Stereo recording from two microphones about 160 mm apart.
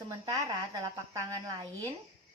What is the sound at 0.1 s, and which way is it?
Speech, 20° right (ahead or behind).